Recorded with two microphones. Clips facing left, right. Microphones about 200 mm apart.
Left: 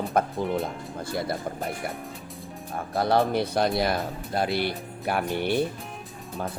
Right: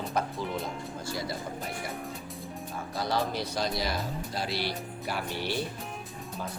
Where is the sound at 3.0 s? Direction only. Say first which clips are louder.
Left 8 dB; 60° left (ahead or behind).